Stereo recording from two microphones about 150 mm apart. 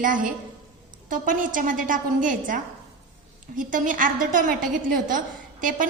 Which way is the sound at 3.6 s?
60° right (ahead or behind).